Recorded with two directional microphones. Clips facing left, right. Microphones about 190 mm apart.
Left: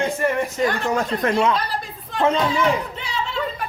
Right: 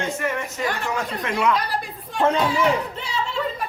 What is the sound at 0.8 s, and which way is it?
Speech, 40° left (ahead or behind).